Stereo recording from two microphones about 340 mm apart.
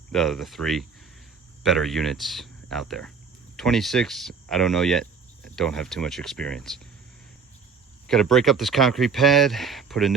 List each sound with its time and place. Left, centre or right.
0.1 s speech: centre
8.0 s speech: centre